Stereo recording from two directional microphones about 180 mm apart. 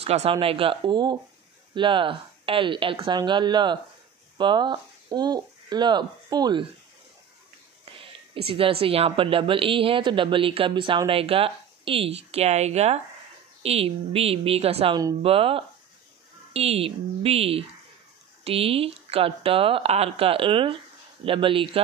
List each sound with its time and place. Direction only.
0.0 s a woman's voice: 35° right (ahead or behind)
8.0 s a woman's voice: 30° right (ahead or behind)